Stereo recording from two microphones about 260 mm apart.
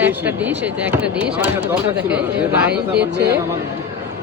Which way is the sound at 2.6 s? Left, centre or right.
Centre.